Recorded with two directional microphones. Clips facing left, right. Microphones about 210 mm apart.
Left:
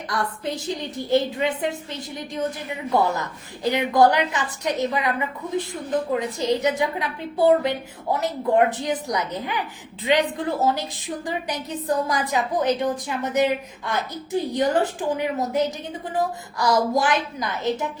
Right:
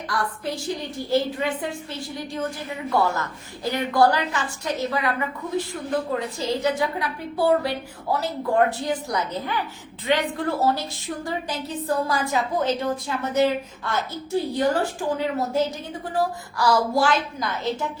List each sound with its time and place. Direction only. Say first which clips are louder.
0.1 s a woman's voice: left 1 dB; 20° left (ahead or behind)